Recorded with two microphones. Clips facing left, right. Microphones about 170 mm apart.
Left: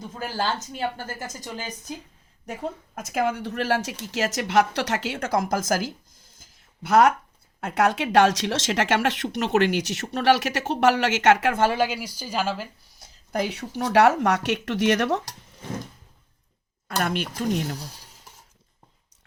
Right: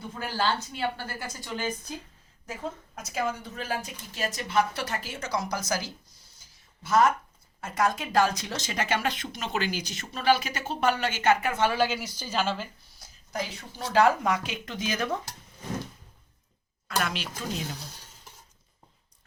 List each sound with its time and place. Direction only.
0.2 s speech: 45° left (ahead or behind)
2.5 s a woman's voice: 60° left (ahead or behind); by 11.5 s 85° left
11.7 s speech: 15° left (ahead or behind)
13.3 s a woman's voice: 65° left (ahead or behind)
17.0 s speech: 55° left (ahead or behind)